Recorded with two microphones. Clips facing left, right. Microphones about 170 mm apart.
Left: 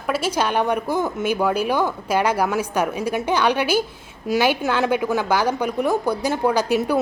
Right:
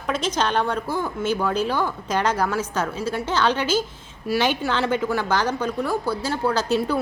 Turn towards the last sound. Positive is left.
turn(degrees=15)  # may be behind; listen again after turning